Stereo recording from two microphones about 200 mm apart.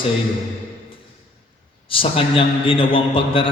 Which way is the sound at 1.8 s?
25° left (ahead or behind).